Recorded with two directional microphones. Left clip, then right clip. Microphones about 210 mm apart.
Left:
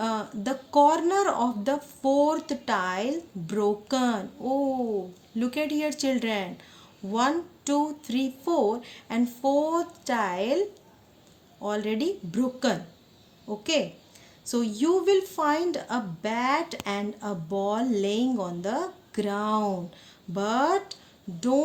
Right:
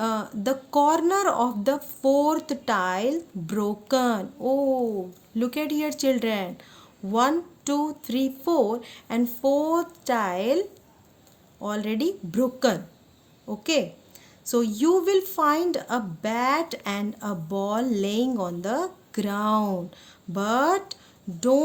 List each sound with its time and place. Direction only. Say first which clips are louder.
0.0 s a woman's voice: right 3 dB; 55° right (ahead or behind)